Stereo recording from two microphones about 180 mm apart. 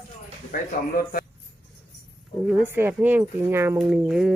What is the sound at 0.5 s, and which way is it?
Speech, 55° left (ahead or behind).